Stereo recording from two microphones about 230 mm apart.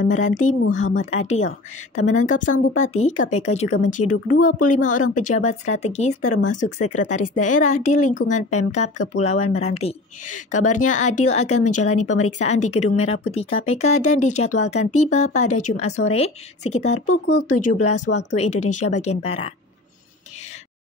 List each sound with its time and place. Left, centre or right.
0.1 s speech: left